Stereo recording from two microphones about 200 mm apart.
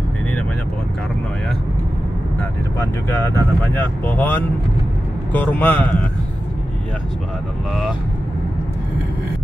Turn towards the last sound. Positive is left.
turn(degrees=-5)  # may be behind; listen again after turning